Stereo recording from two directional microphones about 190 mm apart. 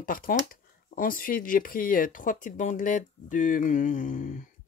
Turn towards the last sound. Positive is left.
turn(degrees=45)  # may be behind; listen again after turning